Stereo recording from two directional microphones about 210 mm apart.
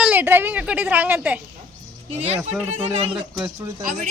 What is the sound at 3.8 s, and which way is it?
Speech, 40° right (ahead or behind).